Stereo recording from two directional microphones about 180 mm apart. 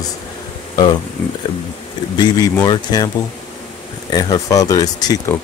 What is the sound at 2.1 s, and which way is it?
Speech, 20° left (ahead or behind).